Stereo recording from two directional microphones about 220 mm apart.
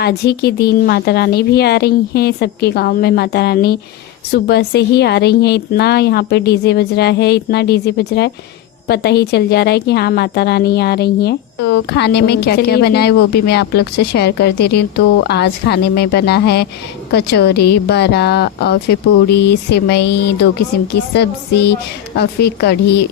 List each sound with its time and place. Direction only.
0.0 s a woman's voice: 45° left (ahead or behind)